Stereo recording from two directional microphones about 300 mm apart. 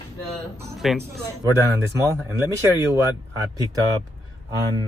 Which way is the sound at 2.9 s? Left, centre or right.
Centre.